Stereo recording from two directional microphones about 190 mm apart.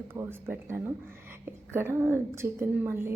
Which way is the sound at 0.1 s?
10° right (ahead or behind).